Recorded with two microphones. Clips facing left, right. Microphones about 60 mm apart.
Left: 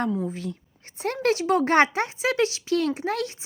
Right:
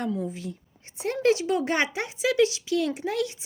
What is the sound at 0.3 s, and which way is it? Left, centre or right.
Speech, left.